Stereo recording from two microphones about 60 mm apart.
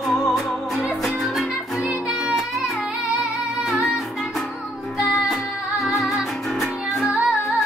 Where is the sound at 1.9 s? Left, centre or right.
Centre.